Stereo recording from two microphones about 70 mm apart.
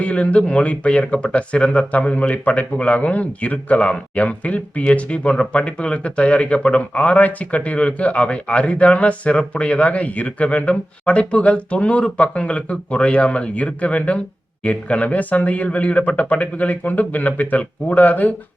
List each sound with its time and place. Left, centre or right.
0.0 s speech: centre